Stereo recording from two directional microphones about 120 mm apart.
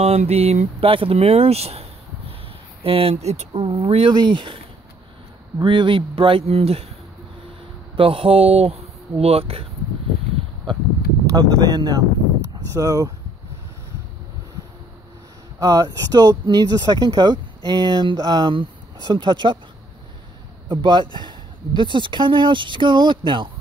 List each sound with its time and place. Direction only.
0.0 s speech: 60° right (ahead or behind)
3.6 s speech: 45° right (ahead or behind)
5.6 s speech: 40° right (ahead or behind)
7.9 s speech: 50° right (ahead or behind)
11.2 s speech: 35° right (ahead or behind)
15.6 s speech: 30° right (ahead or behind)
20.6 s speech: 40° right (ahead or behind)